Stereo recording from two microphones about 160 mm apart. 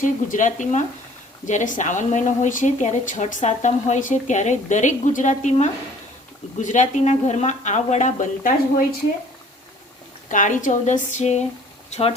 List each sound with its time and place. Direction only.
0.0 s a woman's voice: 55° left (ahead or behind)
10.2 s a woman's voice: 50° left (ahead or behind)